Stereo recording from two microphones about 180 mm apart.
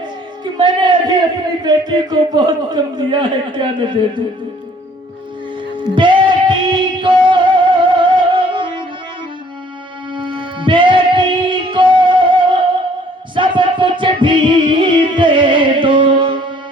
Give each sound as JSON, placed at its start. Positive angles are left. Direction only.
{"t": 0.4, "sound": "music", "side_deg": -25}
{"t": 1.6, "sound": "a man's voice", "side_deg": -25}
{"t": 5.9, "sound": "music", "side_deg": -25}
{"t": 10.2, "sound": "music", "side_deg": -25}